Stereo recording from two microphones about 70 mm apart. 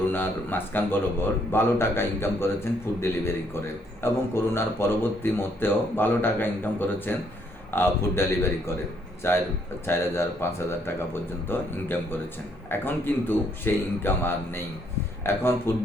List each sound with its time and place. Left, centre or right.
0.1 s speech: left